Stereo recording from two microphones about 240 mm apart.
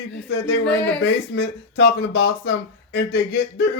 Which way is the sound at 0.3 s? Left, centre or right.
Left.